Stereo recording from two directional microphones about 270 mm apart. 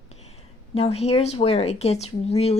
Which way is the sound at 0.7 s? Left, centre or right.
Left.